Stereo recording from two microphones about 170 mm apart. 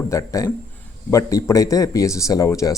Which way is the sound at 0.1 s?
20° left (ahead or behind).